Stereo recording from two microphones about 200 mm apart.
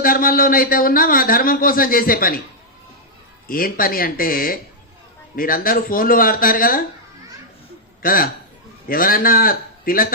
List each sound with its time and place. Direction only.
0.0 s a man's voice: 45° left (ahead or behind)
3.4 s a man's voice: 45° left (ahead or behind)
8.0 s a man's voice: 45° left (ahead or behind)